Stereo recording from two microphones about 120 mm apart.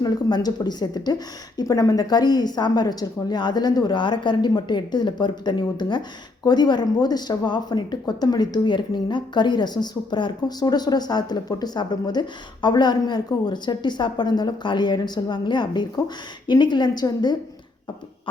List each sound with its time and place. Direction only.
0.0 s a woman's voice: 35° left (ahead or behind)